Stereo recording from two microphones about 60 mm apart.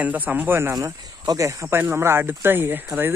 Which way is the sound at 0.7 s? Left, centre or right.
Right.